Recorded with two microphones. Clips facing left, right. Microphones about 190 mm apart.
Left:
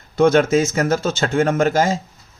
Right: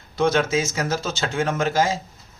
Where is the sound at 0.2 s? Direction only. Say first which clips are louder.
Left 6 dB; 50° left (ahead or behind).